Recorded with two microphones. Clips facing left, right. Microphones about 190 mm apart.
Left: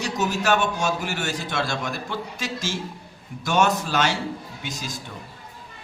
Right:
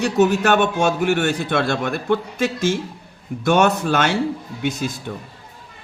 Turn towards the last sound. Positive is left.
turn(degrees=-60)  # may be behind; listen again after turning